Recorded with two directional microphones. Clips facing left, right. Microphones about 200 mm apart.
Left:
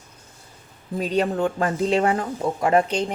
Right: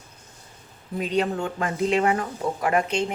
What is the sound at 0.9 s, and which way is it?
Speech, 35° left (ahead or behind).